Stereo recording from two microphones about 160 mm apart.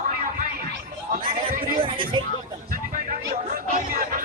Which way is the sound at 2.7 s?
60° right (ahead or behind).